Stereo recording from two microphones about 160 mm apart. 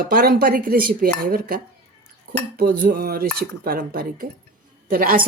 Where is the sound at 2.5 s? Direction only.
65° right (ahead or behind).